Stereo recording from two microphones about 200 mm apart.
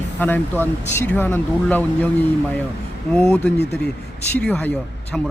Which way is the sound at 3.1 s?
5° left (ahead or behind).